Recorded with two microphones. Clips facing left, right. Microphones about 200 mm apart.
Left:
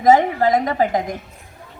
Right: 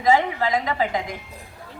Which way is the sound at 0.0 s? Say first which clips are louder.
Left 5 dB; 45° left (ahead or behind).